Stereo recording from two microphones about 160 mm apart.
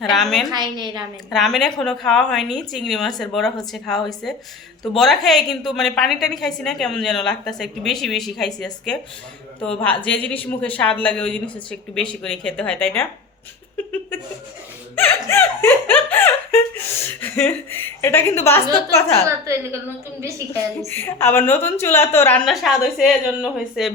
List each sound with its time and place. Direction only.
0.0 s a woman's voice: centre (ahead or behind)
0.5 s a woman's voice: 25° right (ahead or behind)
1.3 s a woman's voice: centre (ahead or behind)
14.9 s a woman's voice: 10° left (ahead or behind)
20.8 s a woman's voice: 15° left (ahead or behind); by 23.9 s centre (ahead or behind)